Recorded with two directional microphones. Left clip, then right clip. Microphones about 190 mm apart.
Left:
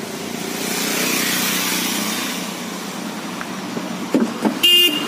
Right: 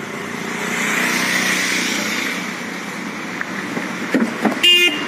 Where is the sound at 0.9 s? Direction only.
65° left (ahead or behind); by 2.2 s 50° left (ahead or behind).